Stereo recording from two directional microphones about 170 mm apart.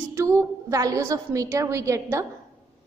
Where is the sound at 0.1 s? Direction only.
15° right (ahead or behind).